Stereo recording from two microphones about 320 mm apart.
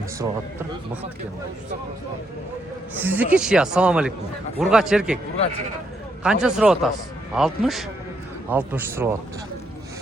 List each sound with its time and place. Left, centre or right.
3.0 s speech: centre
6.2 s speech: centre